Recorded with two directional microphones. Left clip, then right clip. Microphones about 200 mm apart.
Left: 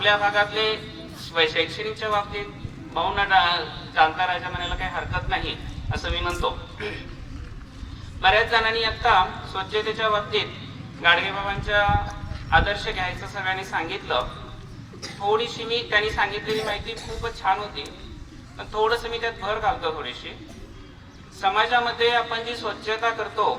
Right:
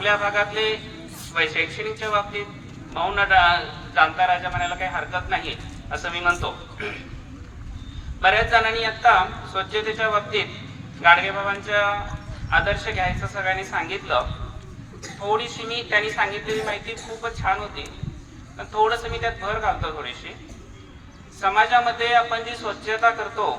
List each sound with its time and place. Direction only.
0.0 s a man's voice: 15° right (ahead or behind)
8.2 s a man's voice: 15° right (ahead or behind)
21.4 s a man's voice: 10° right (ahead or behind)